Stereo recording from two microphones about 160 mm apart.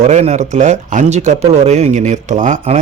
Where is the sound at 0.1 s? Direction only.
45° right (ahead or behind).